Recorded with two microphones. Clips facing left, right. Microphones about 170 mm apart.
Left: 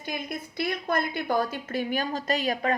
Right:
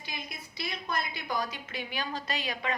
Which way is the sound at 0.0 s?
55° left (ahead or behind).